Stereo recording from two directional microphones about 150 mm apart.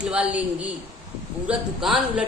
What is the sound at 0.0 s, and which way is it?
A woman's voice, 5° right (ahead or behind).